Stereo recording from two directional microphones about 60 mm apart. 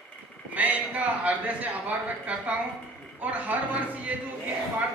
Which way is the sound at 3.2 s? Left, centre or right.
Right.